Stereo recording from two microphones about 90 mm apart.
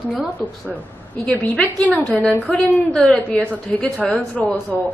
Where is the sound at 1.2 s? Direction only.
15° left (ahead or behind).